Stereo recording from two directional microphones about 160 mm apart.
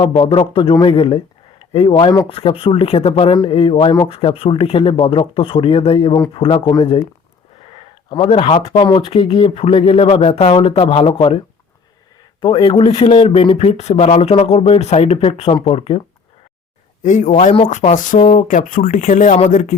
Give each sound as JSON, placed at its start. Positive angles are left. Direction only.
{"t": 0.0, "sound": "a man's voice", "side_deg": 30}
{"t": 7.8, "sound": "a man's voice", "side_deg": 30}
{"t": 12.4, "sound": "a man's voice", "side_deg": 30}
{"t": 17.0, "sound": "speech", "side_deg": 50}